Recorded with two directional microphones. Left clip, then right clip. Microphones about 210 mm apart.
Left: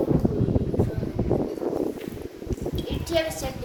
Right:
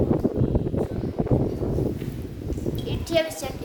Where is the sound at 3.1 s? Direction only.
40° right (ahead or behind).